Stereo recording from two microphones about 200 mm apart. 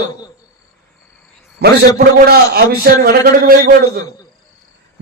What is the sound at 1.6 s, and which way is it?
A man's voice, 50° right (ahead or behind).